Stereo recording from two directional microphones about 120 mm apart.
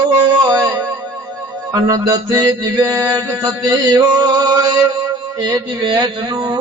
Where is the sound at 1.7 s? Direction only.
25° right (ahead or behind).